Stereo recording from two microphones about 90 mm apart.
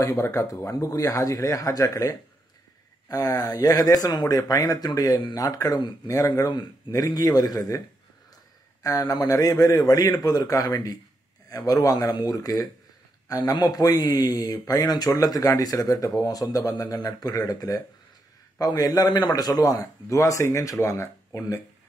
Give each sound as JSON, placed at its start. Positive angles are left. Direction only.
{"t": 0.0, "sound": "speech", "side_deg": 30}
{"t": 8.8, "sound": "speech", "side_deg": 40}